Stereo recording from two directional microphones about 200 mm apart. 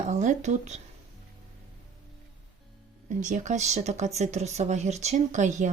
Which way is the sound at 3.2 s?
40° right (ahead or behind).